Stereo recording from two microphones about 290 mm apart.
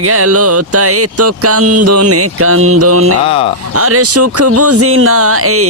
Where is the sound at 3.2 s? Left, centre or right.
Centre.